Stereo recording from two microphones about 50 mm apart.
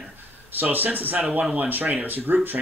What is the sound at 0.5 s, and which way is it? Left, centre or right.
Speech, right.